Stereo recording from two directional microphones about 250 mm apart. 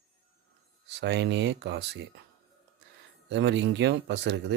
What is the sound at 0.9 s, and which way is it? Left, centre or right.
Speech, right.